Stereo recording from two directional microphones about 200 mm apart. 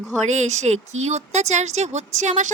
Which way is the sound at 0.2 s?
35° right (ahead or behind).